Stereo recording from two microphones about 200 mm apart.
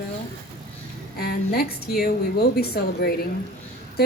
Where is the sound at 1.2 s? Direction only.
50° left (ahead or behind).